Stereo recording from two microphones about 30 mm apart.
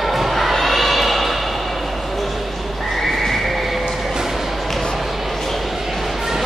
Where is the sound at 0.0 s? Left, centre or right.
Centre.